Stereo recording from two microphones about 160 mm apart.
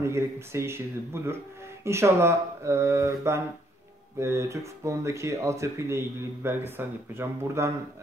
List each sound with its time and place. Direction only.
0.0 s speech: 15° right (ahead or behind)